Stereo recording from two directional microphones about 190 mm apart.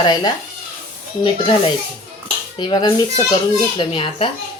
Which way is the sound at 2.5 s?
25° left (ahead or behind).